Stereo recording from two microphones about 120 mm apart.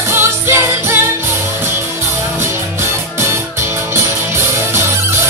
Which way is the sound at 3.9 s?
20° right (ahead or behind).